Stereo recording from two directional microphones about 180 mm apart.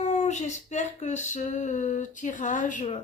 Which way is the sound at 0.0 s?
40° left (ahead or behind).